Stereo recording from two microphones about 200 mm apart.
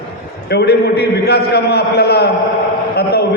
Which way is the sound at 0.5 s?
55° left (ahead or behind).